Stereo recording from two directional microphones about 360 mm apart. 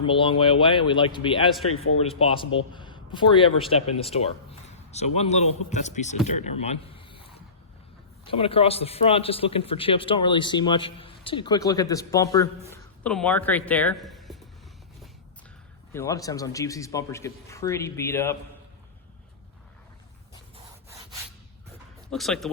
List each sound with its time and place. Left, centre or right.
0.0 s a man's voice: centre
1.7 s a man's voice: left
2.0 s a man's voice: centre
6.3 s a sound: centre
8.2 s a man's voice: centre
15.9 s a man's voice: centre
22.1 s speech: centre